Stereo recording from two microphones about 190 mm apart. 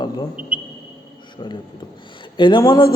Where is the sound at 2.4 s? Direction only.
25° left (ahead or behind).